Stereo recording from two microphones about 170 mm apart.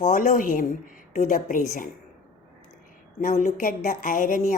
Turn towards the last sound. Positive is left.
turn(degrees=50)  # may be behind; listen again after turning